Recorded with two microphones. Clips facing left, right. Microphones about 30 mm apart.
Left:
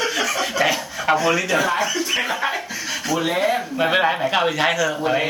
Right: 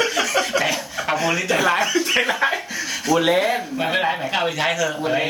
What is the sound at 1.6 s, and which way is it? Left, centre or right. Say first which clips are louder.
Speech: right 2 dB; right.